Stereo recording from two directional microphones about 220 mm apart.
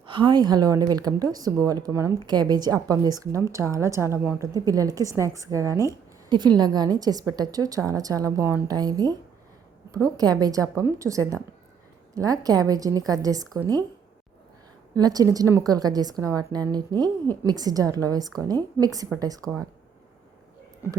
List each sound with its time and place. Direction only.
0.0 s a woman's voice: 20° right (ahead or behind)
14.9 s a woman's voice: 15° right (ahead or behind)